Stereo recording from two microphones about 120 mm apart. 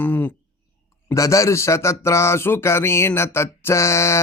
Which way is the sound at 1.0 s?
25° left (ahead or behind).